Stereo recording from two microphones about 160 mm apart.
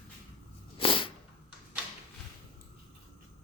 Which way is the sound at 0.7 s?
35° left (ahead or behind).